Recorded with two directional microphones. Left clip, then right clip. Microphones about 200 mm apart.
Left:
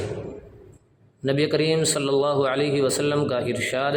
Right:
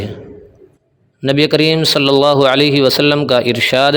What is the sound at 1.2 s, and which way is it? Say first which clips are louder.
A man's voice: right 9 dB; 40° right (ahead or behind).